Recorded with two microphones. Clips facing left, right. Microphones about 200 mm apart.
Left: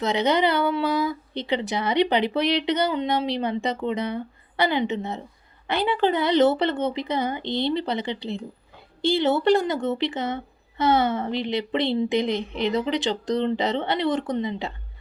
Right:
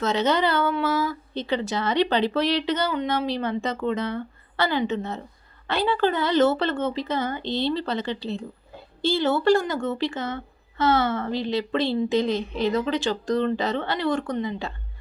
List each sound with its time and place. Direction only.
0.0 s a woman's voice: 15° left (ahead or behind)